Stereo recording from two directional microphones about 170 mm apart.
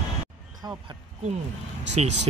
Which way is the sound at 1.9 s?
40° right (ahead or behind).